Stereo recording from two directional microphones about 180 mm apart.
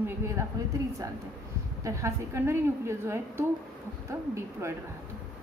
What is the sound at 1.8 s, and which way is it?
A woman's voice, 15° right (ahead or behind).